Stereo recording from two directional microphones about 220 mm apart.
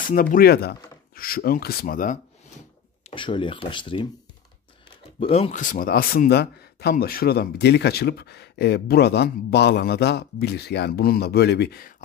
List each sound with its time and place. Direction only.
0.0 s speech: 40° left (ahead or behind)
3.1 s speech: 20° left (ahead or behind)
5.2 s a man's voice: 25° left (ahead or behind); by 11.9 s 45° left (ahead or behind)